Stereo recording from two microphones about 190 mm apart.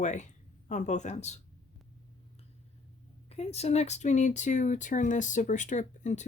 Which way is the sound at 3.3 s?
35° left (ahead or behind).